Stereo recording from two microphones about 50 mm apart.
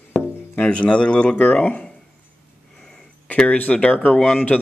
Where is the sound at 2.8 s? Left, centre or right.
Centre.